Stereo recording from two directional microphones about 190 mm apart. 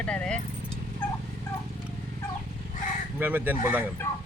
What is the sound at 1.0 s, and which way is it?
Fowl, 10° left (ahead or behind).